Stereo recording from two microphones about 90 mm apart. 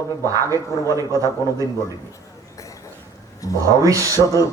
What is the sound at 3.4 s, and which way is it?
Speech, 40° left (ahead or behind).